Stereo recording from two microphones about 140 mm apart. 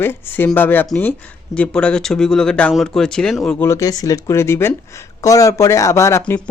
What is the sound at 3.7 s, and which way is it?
Speech, 25° left (ahead or behind).